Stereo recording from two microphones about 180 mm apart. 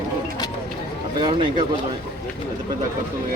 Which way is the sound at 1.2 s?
25° right (ahead or behind).